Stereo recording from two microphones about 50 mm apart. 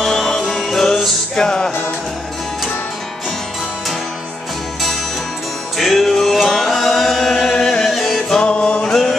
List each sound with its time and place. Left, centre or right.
0.0 s music: centre
5.8 s music: centre
7.9 s music: centre
8.4 s music: left
8.8 s chant: centre